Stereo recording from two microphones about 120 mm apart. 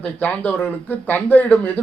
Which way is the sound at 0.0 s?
10° left (ahead or behind).